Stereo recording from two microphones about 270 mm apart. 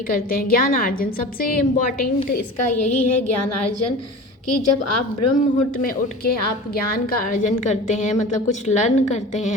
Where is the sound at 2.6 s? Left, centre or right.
Left.